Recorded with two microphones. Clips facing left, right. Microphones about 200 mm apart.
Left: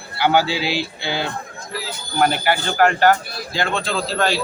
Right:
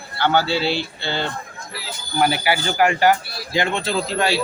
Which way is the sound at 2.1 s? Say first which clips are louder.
Left 1 dB; 5° right (ahead or behind).